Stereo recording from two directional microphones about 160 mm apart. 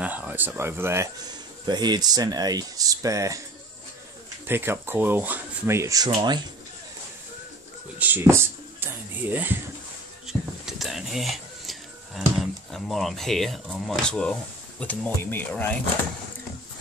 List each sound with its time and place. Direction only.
0.0 s speech: 10° right (ahead or behind)
1.7 s speech: 25° right (ahead or behind)
4.5 s speech: 15° right (ahead or behind)
8.0 s speech: 15° right (ahead or behind)
10.2 s a sound: centre (ahead or behind)
12.4 s speech: centre (ahead or behind)